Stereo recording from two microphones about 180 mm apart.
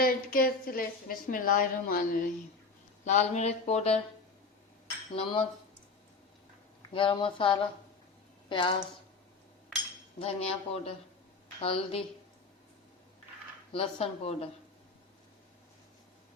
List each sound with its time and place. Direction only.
0.0 s a woman's voice: 55° left (ahead or behind); by 4.0 s 35° left (ahead or behind)
5.1 s speech: 30° left (ahead or behind)
6.9 s a woman's voice: 30° left (ahead or behind)
10.2 s speech: 35° left (ahead or behind)
13.7 s speech: 35° left (ahead or behind)